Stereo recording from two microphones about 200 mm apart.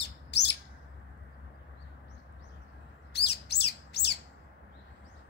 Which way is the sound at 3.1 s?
55° left (ahead or behind).